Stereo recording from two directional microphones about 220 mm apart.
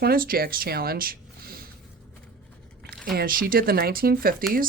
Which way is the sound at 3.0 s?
40° right (ahead or behind).